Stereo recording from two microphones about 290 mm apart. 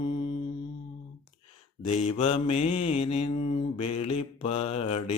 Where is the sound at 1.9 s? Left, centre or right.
Left.